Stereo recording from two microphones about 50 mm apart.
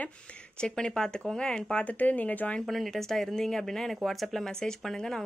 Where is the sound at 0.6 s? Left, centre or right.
Centre.